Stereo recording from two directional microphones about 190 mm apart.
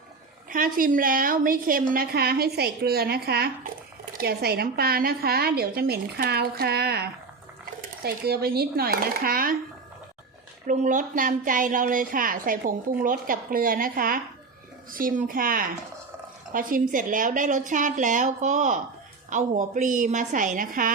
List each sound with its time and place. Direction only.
0.5 s a woman's voice: 45° right (ahead or behind)
10.7 s a woman's voice: 45° right (ahead or behind)